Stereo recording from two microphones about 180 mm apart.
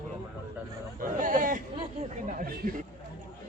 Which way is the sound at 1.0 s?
45° right (ahead or behind).